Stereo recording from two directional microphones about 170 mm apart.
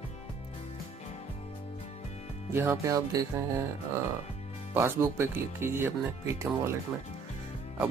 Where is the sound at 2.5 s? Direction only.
15° right (ahead or behind).